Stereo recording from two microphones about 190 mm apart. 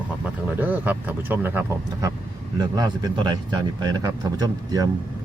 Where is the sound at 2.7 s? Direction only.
20° right (ahead or behind).